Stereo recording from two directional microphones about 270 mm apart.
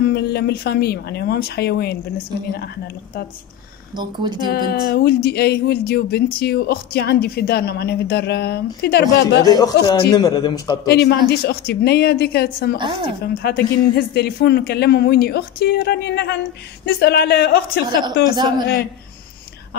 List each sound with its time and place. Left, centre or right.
0.0 s speech: left
3.9 s speech: centre
4.5 s speech: left
9.4 s a man's voice: centre
10.9 s speech: left
12.7 s speech: centre
13.2 s speech: left